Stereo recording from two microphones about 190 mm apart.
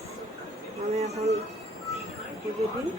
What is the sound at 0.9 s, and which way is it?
Speech, 35° right (ahead or behind).